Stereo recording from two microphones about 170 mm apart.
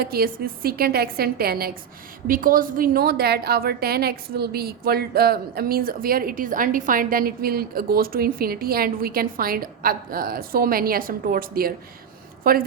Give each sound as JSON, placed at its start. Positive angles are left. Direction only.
{"t": 0.0, "sound": "a woman's voice", "side_deg": -60}